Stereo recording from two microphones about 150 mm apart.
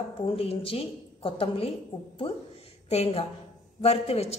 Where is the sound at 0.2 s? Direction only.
40° left (ahead or behind).